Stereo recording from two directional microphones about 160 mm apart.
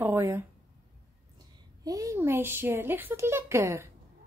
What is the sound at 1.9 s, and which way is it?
Speech, 20° right (ahead or behind).